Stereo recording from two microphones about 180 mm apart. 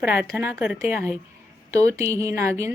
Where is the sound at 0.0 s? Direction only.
10° right (ahead or behind).